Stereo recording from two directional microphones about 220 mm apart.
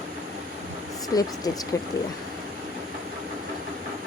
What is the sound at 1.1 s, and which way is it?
Speech, 15° left (ahead or behind).